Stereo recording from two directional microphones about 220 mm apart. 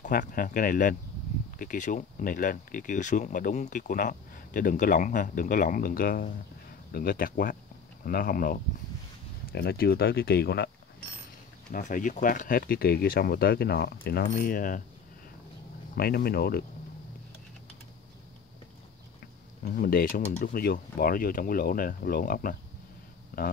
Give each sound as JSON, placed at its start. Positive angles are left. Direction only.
{"t": 0.0, "sound": "speech", "side_deg": 35}
{"t": 11.7, "sound": "speech", "side_deg": 35}
{"t": 16.0, "sound": "speech", "side_deg": 45}
{"t": 19.6, "sound": "speech", "side_deg": 40}